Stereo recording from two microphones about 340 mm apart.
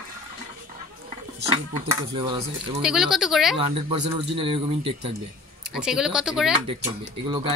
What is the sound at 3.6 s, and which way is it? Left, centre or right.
Speech, centre.